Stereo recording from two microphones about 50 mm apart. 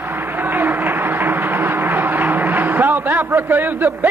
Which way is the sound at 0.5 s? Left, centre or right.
Right.